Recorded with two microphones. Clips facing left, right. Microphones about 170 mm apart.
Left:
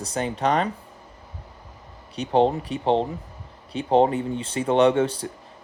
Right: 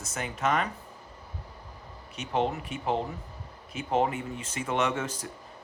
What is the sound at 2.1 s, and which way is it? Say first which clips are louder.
Speech: left 9 dB; 30° left (ahead or behind).